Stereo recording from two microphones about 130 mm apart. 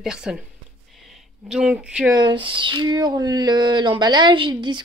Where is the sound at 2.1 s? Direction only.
35° right (ahead or behind).